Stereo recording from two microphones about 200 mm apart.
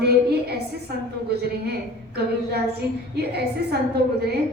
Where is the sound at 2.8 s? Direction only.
55° right (ahead or behind).